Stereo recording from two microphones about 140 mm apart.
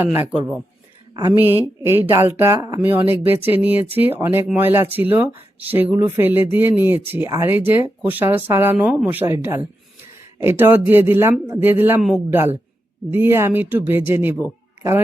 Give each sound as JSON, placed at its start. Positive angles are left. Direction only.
{"t": 0.3, "sound": "speech", "side_deg": -10}